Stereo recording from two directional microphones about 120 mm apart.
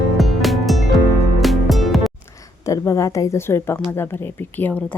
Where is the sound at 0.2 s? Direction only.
Centre (ahead or behind).